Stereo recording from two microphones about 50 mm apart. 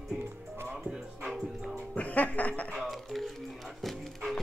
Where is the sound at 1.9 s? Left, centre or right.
Left.